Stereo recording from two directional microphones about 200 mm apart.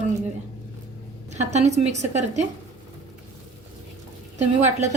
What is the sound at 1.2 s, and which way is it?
A woman's voice, 35° right (ahead or behind).